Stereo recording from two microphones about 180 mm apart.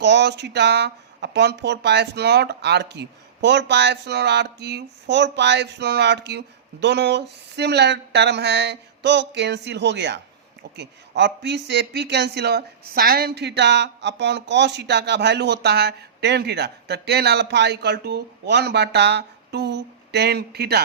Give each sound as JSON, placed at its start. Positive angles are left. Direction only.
{"t": 0.0, "sound": "speech", "side_deg": -75}